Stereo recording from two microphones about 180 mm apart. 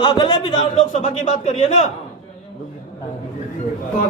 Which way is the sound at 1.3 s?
40° left (ahead or behind).